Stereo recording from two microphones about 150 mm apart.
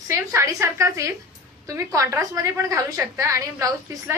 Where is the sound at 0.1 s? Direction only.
20° right (ahead or behind).